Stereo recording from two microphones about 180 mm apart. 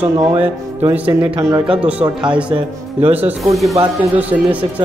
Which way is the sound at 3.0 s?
10° right (ahead or behind).